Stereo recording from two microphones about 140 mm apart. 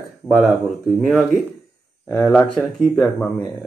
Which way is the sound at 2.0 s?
10° left (ahead or behind).